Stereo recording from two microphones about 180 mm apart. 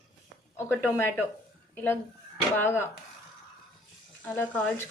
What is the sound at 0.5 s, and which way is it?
Speech, 15° left (ahead or behind).